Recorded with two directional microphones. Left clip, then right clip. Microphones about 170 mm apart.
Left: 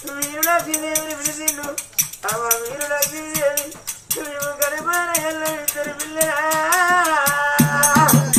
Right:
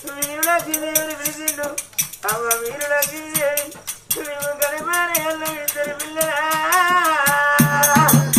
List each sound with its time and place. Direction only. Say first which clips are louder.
0.3 s music: even; 5° left (ahead or behind)
4.6 s music: even; 5° left (ahead or behind)